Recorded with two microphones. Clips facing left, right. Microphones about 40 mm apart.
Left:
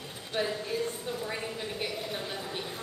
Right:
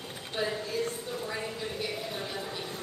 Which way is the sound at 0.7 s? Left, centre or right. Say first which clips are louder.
Even; left.